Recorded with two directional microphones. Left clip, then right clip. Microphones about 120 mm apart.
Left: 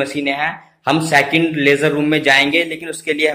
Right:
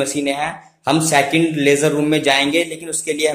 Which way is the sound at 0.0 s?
10° right (ahead or behind).